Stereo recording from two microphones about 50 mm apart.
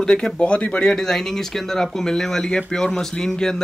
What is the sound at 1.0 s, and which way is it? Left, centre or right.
Speech, centre.